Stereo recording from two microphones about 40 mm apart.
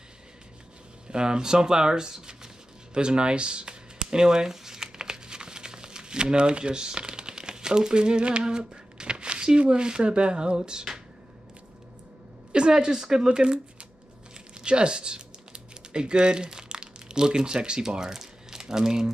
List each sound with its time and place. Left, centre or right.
1.1 s a sound: centre
12.5 s speech: centre
13.4 s speech: right
14.5 s typing: right